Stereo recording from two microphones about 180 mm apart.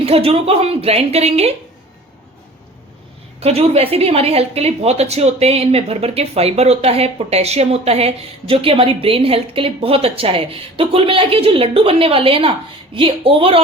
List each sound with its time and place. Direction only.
0.0 s a woman's voice: 35° right (ahead or behind)
3.4 s a woman's voice: 35° right (ahead or behind)